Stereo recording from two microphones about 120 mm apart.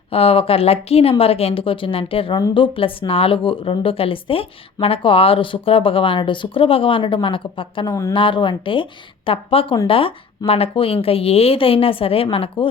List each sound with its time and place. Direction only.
0.1 s speech: 55° left (ahead or behind)